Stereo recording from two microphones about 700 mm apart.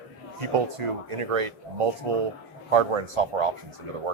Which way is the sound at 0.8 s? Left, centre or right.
Right.